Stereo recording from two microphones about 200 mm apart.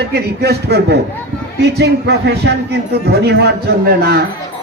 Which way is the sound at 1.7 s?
55° right (ahead or behind).